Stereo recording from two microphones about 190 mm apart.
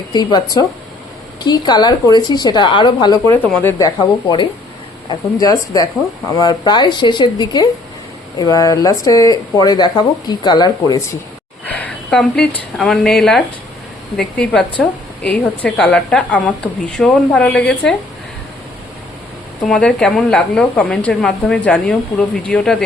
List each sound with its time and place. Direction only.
0.1 s speech: 20° left (ahead or behind)
3.4 s a woman's voice: 10° left (ahead or behind)
11.6 s a woman's voice: 10° left (ahead or behind)
19.6 s speech: 5° left (ahead or behind)